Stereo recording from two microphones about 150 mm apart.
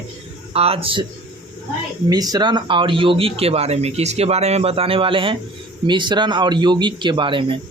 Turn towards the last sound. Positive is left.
turn(degrees=-35)  # may be behind; listen again after turning